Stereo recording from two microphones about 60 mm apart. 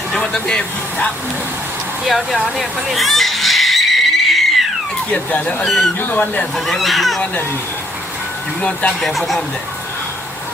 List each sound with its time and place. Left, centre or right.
0.2 s speech: centre
2.0 s a sound: centre
5.3 s speech: left
6.7 s speech: centre
8.6 s speech: left
9.0 s speech: centre